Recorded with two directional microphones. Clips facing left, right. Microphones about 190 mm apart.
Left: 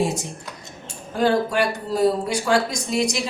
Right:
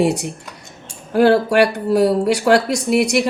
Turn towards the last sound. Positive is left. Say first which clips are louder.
# right 7 dB
turn(degrees=-65)  # may be behind; listen again after turning